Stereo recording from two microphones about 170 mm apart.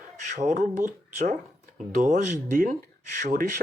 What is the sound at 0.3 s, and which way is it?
Speech, 45° right (ahead or behind).